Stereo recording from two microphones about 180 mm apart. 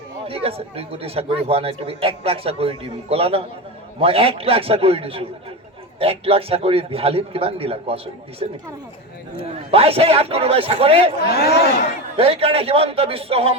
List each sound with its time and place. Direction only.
0.3 s speech: 30° right (ahead or behind)
11.3 s speech: 60° left (ahead or behind)
12.1 s speech: 35° right (ahead or behind)